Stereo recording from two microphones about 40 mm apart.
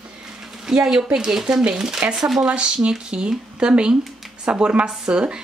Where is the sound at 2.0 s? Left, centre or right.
Right.